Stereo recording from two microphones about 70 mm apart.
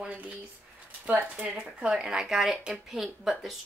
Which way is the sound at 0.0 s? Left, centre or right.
Right.